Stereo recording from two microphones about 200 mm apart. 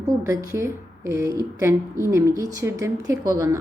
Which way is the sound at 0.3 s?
15° right (ahead or behind).